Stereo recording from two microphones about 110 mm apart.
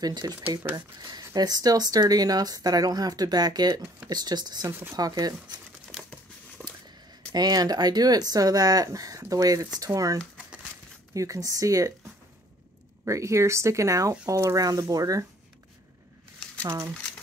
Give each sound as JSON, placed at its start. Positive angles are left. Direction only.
{"t": 0.0, "sound": "speech", "side_deg": -40}
{"t": 5.9, "sound": "crumpling", "side_deg": 5}
{"t": 6.6, "sound": "a sound", "side_deg": 10}
{"t": 7.3, "sound": "speech", "side_deg": -40}
{"t": 13.0, "sound": "speech", "side_deg": -25}